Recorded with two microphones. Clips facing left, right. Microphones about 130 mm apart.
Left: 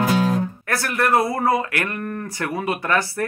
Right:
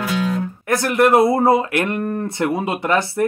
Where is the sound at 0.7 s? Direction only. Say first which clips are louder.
Right 6 dB; 20° right (ahead or behind).